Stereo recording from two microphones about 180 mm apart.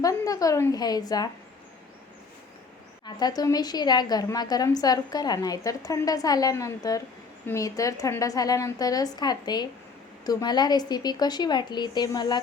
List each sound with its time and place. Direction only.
0.0 s a woman's voice: 20° left (ahead or behind)
3.2 s a woman's voice: 20° left (ahead or behind)